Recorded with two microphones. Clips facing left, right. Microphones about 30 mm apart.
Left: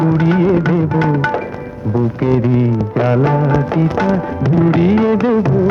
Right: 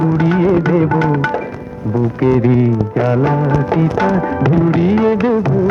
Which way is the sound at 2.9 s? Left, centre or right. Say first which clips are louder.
Left 2 dB; centre.